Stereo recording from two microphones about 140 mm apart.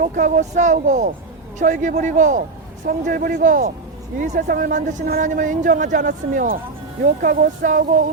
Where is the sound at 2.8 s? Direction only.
75° right (ahead or behind).